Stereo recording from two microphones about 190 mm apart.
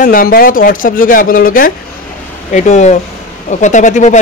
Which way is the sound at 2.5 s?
40° left (ahead or behind).